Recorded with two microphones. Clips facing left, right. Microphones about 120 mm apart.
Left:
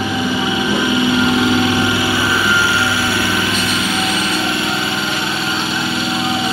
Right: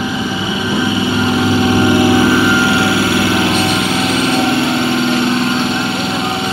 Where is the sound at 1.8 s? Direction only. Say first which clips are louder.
Right 7 dB; 45° right (ahead or behind).